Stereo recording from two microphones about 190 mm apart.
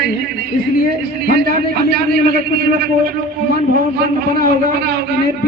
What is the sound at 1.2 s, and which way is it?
A man's voice, 55° right (ahead or behind).